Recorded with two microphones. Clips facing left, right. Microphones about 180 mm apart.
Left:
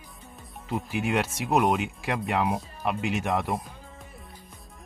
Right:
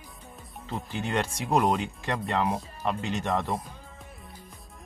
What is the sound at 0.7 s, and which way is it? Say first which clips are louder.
Speech: left 3 dB; 10° left (ahead or behind).